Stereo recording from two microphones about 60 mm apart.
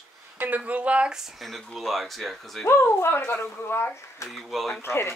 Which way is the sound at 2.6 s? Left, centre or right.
Left.